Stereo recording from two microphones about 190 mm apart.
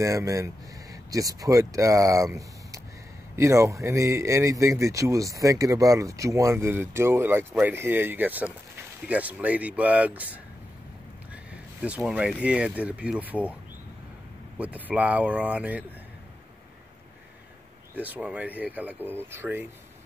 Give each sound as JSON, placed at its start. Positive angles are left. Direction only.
{"t": 0.0, "sound": "a man's voice", "side_deg": -15}
{"t": 3.3, "sound": "a man's voice", "side_deg": -15}
{"t": 11.8, "sound": "a man's voice", "side_deg": -5}
{"t": 14.6, "sound": "a man's voice", "side_deg": -10}
{"t": 17.9, "sound": "a man's voice", "side_deg": -10}